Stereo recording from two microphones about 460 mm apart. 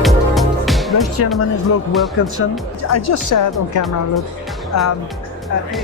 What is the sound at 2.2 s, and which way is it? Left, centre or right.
Speech, left.